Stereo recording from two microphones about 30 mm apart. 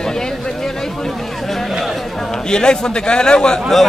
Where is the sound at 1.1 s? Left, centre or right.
Centre.